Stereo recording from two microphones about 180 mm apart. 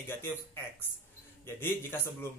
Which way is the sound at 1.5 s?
10° left (ahead or behind).